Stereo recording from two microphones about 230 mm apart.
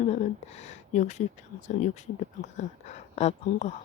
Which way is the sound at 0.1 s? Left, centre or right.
Left.